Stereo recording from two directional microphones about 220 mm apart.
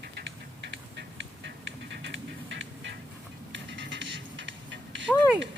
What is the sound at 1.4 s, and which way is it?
Music, 55° right (ahead or behind).